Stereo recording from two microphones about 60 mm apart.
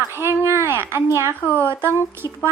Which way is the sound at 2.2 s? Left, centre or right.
Left.